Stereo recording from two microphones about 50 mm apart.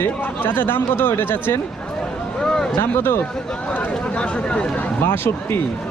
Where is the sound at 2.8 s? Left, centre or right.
Left.